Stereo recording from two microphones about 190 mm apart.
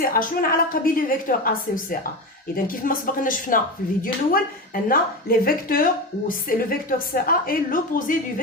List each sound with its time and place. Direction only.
0.0 s a woman's voice: 50° left (ahead or behind)